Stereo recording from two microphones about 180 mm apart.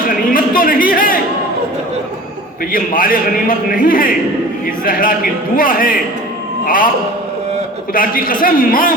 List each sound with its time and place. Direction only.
0.0 s a sound: 50° left (ahead or behind)
2.7 s a man's voice: 50° left (ahead or behind)
7.9 s a man's voice: 50° left (ahead or behind)